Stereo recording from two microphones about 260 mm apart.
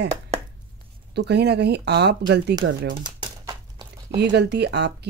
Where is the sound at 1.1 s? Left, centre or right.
Right.